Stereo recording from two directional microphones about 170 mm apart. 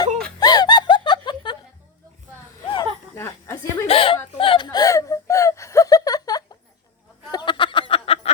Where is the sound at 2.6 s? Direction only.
30° left (ahead or behind).